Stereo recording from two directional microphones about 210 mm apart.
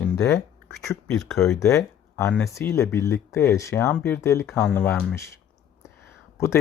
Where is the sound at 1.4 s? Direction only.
10° left (ahead or behind).